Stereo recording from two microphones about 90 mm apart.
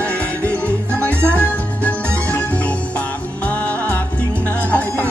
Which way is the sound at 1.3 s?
15° left (ahead or behind).